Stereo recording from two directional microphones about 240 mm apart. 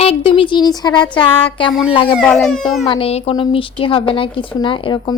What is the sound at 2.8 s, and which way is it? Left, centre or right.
A woman's voice, left.